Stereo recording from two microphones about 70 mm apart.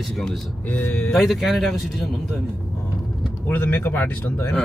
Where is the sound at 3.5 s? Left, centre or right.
Left.